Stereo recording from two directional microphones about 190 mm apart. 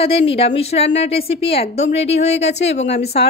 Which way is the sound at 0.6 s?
35° left (ahead or behind).